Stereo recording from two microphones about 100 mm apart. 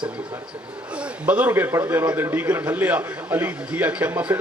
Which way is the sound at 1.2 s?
15° right (ahead or behind).